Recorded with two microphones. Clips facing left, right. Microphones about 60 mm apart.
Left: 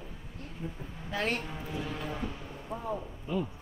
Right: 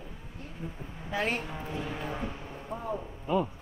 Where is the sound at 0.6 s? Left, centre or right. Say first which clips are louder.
Even; centre.